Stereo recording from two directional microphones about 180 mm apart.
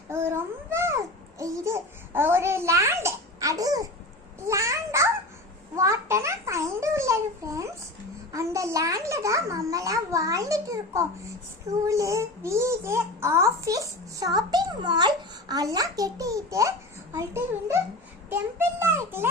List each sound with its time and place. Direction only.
0.1 s a child's voice: 15° right (ahead or behind)
18.8 s a child's voice: 15° right (ahead or behind)